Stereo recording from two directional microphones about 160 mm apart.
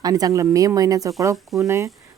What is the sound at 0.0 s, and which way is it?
Speech, 25° right (ahead or behind).